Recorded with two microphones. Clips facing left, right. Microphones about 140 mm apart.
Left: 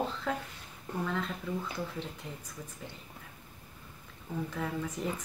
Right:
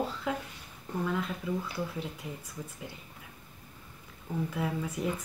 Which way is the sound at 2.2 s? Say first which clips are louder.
Right 3 dB; 10° right (ahead or behind).